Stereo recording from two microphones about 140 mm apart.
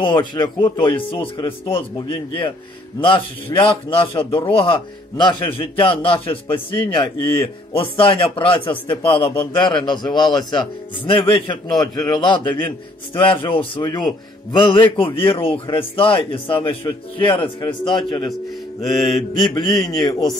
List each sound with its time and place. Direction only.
0.0 s speech: 35° left (ahead or behind)
7.3 s speech: 15° left (ahead or behind)
8.0 s speech: 40° left (ahead or behind)
18.9 s mantra: 25° left (ahead or behind)